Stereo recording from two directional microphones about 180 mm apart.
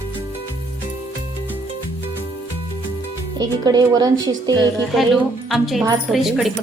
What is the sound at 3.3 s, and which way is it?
Speech, 20° right (ahead or behind).